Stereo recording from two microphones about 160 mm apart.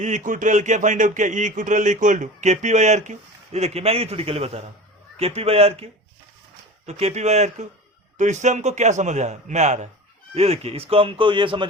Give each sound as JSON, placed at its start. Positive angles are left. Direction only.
{"t": 0.0, "sound": "speech", "side_deg": -50}